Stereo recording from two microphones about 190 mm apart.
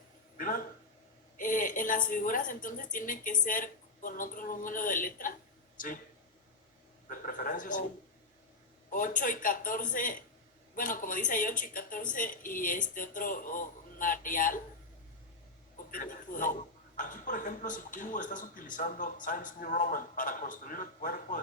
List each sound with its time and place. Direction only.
0.3 s a sound: 45° left (ahead or behind)
1.4 s a man's voice: 45° left (ahead or behind)
7.1 s a man's voice: 45° left (ahead or behind)
8.9 s a man's voice: 45° left (ahead or behind)
15.9 s a man's voice: 45° left (ahead or behind)